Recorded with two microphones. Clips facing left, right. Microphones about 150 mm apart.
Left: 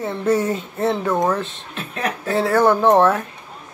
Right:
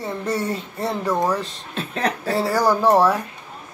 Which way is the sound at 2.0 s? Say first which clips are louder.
Right 1 dB; 30° right (ahead or behind).